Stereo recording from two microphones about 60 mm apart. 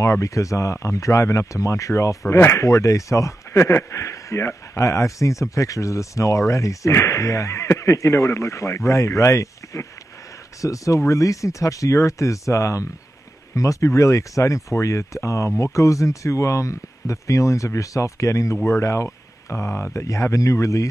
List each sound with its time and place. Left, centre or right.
0.0 s a man's voice: left
2.6 s a man's voice: left